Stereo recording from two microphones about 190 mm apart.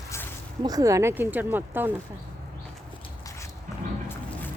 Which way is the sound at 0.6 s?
20° right (ahead or behind).